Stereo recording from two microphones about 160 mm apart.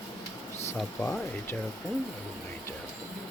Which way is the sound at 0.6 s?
10° left (ahead or behind).